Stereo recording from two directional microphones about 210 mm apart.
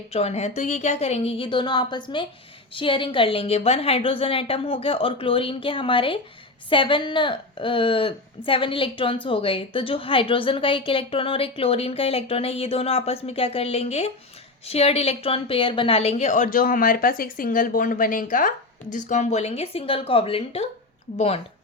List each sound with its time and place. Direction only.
0.1 s a woman's voice: 30° left (ahead or behind)